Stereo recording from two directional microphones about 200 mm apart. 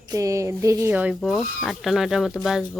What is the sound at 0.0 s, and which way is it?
A woman's voice, 15° right (ahead or behind).